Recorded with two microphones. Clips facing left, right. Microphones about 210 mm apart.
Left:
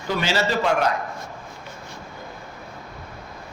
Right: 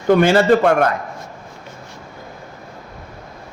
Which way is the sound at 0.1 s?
55° right (ahead or behind).